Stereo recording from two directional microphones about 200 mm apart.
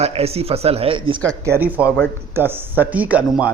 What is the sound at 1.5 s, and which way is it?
A man's voice, 10° right (ahead or behind).